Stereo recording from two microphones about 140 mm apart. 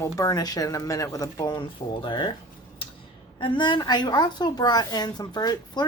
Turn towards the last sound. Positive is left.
turn(degrees=30)  # may be behind; listen again after turning